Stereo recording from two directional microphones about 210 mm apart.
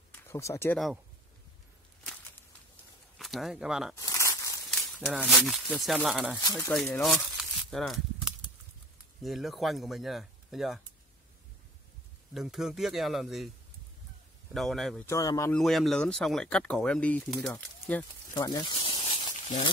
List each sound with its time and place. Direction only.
0.1 s a sound: 15° left (ahead or behind)
3.2 s speech: centre (ahead or behind)
3.9 s a sound: 15° left (ahead or behind)
4.6 s speech: centre (ahead or behind)
6.4 s speech: 15° left (ahead or behind)
7.0 s speech: centre (ahead or behind)
9.2 s speech: centre (ahead or behind)
12.4 s speech: centre (ahead or behind)
14.5 s speech: centre (ahead or behind)
15.0 s speech: 15° left (ahead or behind)
15.5 s speech: centre (ahead or behind)
18.3 s snake: 20° left (ahead or behind)